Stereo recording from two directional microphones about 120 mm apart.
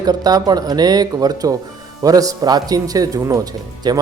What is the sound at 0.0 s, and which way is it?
Speech, 35° right (ahead or behind).